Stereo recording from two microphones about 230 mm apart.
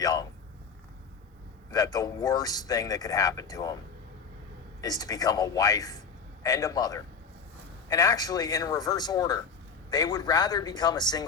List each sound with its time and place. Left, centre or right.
0.0 s a sound: centre
1.7 s speech: centre
4.8 s speech: centre